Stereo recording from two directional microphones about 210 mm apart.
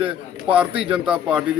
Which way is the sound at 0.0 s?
5° right (ahead or behind).